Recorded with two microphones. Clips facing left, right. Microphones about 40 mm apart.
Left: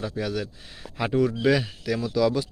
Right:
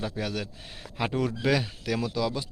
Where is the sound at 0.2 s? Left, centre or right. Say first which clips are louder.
Left 5 dB; right.